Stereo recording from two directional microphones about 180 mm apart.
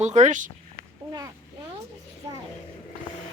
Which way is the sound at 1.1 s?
20° right (ahead or behind).